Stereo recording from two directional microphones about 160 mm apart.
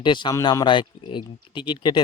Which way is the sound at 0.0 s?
30° left (ahead or behind).